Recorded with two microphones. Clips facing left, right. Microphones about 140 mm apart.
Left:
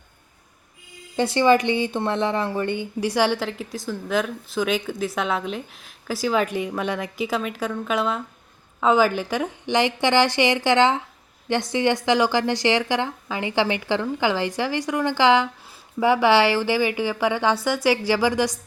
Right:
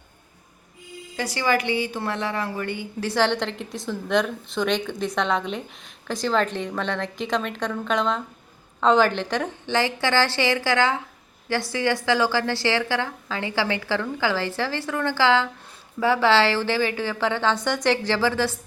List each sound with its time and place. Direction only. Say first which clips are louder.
1.1 s speech: left 6 dB; 25° left (ahead or behind)